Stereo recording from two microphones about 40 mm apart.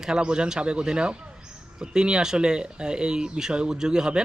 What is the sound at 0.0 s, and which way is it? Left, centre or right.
Speech, centre.